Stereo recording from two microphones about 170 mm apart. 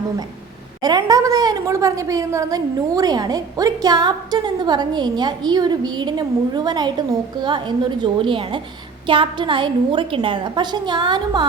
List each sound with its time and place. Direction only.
0.8 s a woman's voice: 25° right (ahead or behind)